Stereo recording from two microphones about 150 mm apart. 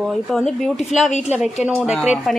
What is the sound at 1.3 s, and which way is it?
A woman's voice, 5° right (ahead or behind).